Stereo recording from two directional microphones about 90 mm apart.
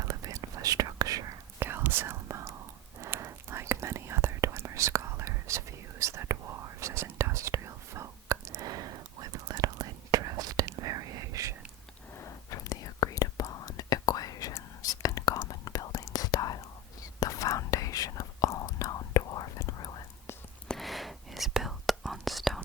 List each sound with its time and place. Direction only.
0.0 s whispering: 40° right (ahead or behind)
1.5 s whispering: 25° right (ahead or behind)
12.2 s whispering: 40° left (ahead or behind)
20.7 s whispering: centre (ahead or behind)